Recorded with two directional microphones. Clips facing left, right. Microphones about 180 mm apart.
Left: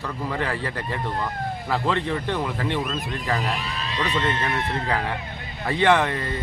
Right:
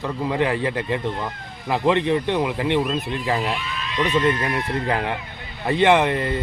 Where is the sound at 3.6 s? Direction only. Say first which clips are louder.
Right 3 dB; 35° left (ahead or behind).